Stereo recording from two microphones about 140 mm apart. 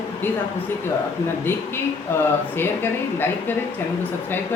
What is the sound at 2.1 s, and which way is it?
Speech, 15° left (ahead or behind).